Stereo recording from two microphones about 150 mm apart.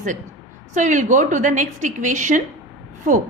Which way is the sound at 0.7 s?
55° right (ahead or behind).